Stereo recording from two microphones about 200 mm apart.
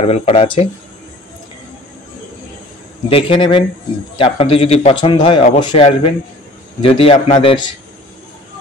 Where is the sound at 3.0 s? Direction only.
25° left (ahead or behind).